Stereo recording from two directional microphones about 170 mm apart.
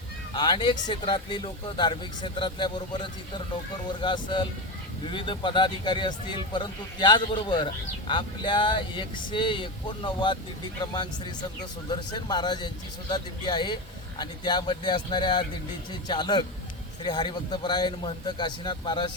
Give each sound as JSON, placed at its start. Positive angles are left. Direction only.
{"t": 0.3, "sound": "speech", "side_deg": 25}